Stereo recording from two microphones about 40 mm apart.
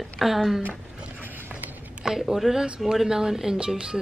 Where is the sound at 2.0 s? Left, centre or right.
Centre.